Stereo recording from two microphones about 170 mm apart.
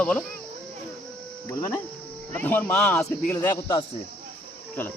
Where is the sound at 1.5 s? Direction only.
15° left (ahead or behind).